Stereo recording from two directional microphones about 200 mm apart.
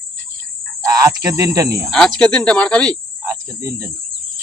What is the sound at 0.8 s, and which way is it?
Speech, 15° right (ahead or behind).